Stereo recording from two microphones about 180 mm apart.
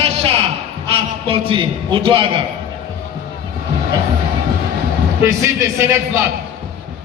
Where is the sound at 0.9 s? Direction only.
30° right (ahead or behind).